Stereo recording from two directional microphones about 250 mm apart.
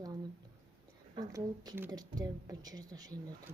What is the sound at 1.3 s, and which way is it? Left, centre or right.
Speech, centre.